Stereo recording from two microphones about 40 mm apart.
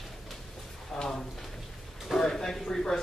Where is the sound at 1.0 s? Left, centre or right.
Centre.